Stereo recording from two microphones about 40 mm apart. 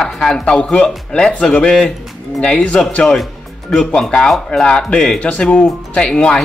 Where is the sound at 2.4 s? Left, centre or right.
Left.